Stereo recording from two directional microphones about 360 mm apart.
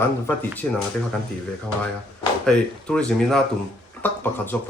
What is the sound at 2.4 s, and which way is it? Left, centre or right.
Speech, centre.